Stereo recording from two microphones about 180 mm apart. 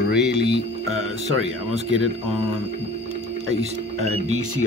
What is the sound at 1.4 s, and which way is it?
Speech, 90° right.